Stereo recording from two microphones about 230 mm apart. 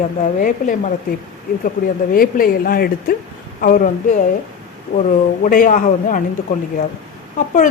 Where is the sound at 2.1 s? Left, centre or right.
Left.